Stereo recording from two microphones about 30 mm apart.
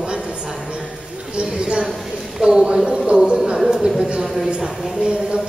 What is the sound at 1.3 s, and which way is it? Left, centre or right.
Speech, right.